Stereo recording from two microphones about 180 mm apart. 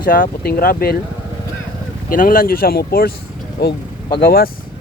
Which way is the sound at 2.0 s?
50° left (ahead or behind).